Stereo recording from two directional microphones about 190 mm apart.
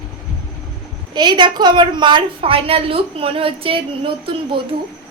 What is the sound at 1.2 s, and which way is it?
A woman's voice, 25° right (ahead or behind).